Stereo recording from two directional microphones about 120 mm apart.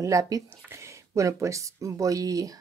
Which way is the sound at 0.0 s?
30° right (ahead or behind).